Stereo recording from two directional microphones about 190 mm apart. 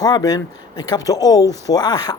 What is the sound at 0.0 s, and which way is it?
Speech, 20° left (ahead or behind).